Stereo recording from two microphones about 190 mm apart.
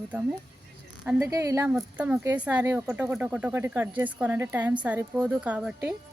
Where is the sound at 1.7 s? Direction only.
5° right (ahead or behind).